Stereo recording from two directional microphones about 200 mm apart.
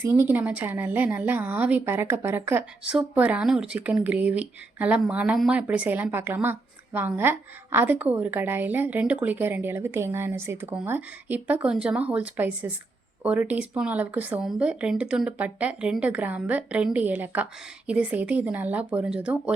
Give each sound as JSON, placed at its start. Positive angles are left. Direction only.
{"t": 0.0, "sound": "a woman's voice", "side_deg": -10}